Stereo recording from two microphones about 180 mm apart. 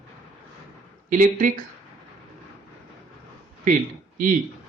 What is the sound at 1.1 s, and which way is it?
Speech, 45° right (ahead or behind).